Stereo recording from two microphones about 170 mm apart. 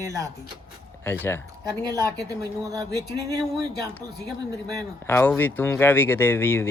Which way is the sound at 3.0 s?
70° left (ahead or behind).